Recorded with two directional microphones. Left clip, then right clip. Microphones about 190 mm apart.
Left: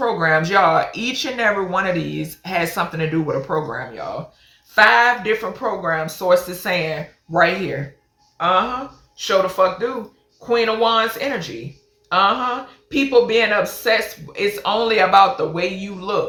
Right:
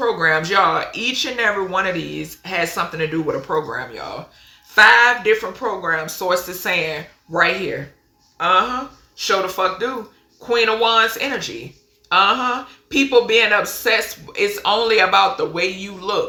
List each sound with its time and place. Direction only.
0.0 s speech: 10° right (ahead or behind)